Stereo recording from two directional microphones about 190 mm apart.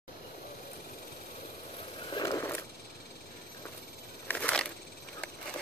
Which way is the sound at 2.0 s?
20° left (ahead or behind).